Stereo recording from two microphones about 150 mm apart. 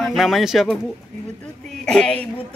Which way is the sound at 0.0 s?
Centre (ahead or behind).